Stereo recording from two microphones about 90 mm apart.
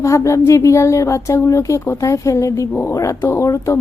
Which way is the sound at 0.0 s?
35° left (ahead or behind).